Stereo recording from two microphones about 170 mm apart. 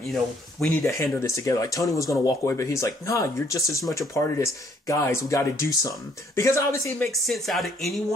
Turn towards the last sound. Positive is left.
turn(degrees=0)  # may be behind; listen again after turning